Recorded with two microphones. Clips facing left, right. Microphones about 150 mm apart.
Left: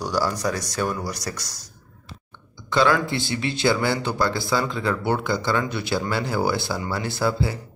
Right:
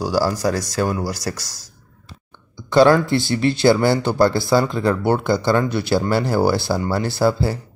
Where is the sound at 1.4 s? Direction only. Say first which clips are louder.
Even; 90° right.